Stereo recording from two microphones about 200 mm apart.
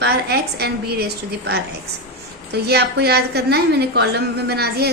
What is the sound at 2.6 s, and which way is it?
A woman's voice, 55° right (ahead or behind).